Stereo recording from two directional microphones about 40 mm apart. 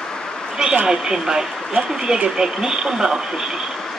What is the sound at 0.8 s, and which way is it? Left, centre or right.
Speech, centre.